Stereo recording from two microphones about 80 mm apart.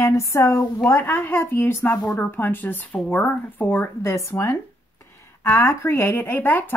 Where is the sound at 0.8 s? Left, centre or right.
Left.